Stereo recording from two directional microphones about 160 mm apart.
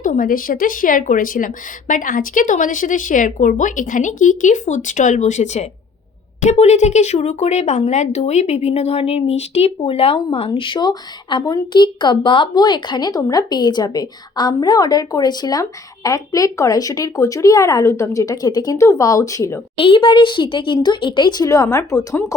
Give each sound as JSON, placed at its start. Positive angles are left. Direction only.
{"t": 0.0, "sound": "a woman's voice", "side_deg": 60}
{"t": 10.2, "sound": "a woman's voice", "side_deg": 25}
{"t": 19.7, "sound": "a woman's voice", "side_deg": 35}